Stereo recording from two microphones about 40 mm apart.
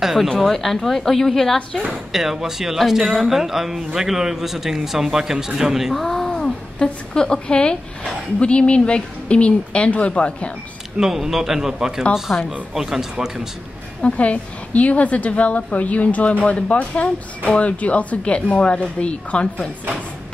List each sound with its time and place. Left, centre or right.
0.0 s a sound: centre
0.5 s a woman's voice: centre
1.9 s speech: centre
5.9 s speech: centre
6.8 s a woman's voice: left
11.0 s speech: centre
14.0 s a woman's voice: left